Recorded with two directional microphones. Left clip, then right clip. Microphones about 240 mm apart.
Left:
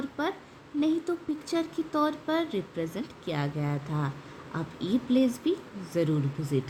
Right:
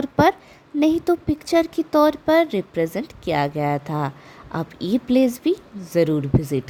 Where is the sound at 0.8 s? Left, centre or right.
Right.